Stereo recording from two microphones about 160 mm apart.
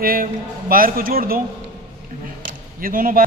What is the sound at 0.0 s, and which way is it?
A man's voice, 65° right (ahead or behind).